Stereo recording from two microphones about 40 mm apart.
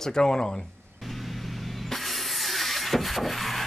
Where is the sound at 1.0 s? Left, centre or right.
Centre.